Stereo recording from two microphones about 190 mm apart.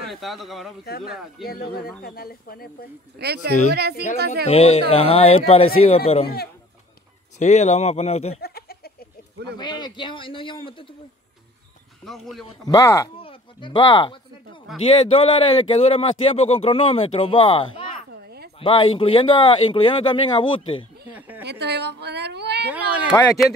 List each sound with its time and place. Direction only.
0.1 s speech: centre (ahead or behind)
0.8 s speech: 55° left (ahead or behind)
3.2 s a woman's voice: 55° right (ahead or behind)
4.5 s speech: 30° left (ahead or behind)
7.3 s speech: 35° left (ahead or behind)
8.4 s a sound: 55° left (ahead or behind)
9.6 s speech: 20° left (ahead or behind)
12.0 s speech: centre (ahead or behind)
12.6 s speech: 15° left (ahead or behind)
18.2 s a sound: 55° right (ahead or behind)
18.6 s speech: 30° left (ahead or behind)
21.1 s a sound: 10° right (ahead or behind)
21.5 s a woman's voice: 60° right (ahead or behind)
22.7 s speech: 5° right (ahead or behind)